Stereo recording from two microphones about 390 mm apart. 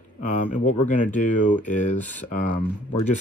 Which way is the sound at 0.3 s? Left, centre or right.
Centre.